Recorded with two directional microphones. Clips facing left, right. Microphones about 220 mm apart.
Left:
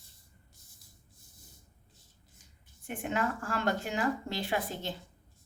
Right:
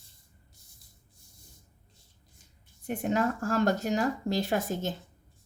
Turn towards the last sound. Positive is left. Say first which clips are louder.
# right 4 dB
turn(degrees=-45)  # may be behind; listen again after turning